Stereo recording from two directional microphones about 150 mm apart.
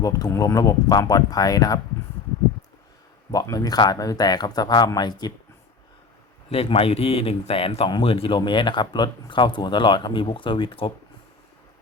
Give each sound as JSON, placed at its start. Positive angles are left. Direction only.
{"t": 0.0, "sound": "speech", "side_deg": 25}
{"t": 3.3, "sound": "speech", "side_deg": 25}
{"t": 6.5, "sound": "speech", "side_deg": 40}